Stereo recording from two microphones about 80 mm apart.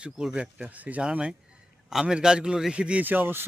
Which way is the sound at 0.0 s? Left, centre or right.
Centre.